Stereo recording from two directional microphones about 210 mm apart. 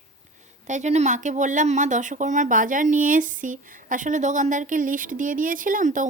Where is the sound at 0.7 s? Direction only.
35° right (ahead or behind).